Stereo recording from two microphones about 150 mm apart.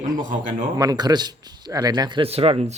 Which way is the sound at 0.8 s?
25° right (ahead or behind).